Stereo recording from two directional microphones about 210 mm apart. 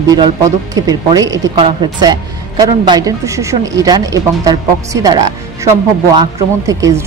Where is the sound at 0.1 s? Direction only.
20° right (ahead or behind).